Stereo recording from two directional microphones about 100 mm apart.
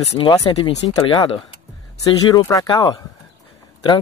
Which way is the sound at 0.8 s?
35° left (ahead or behind).